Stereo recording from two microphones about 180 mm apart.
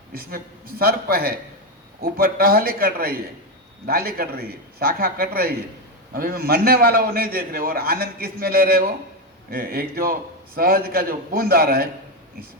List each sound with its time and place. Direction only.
0.1 s a man's voice: 55° right (ahead or behind)